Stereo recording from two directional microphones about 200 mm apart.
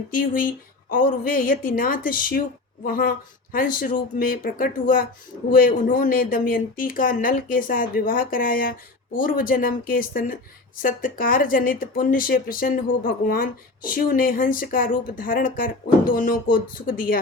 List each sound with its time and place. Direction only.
0.1 s speech: 45° left (ahead or behind)